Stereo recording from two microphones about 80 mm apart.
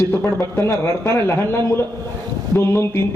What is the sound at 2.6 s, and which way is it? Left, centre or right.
Speech, left.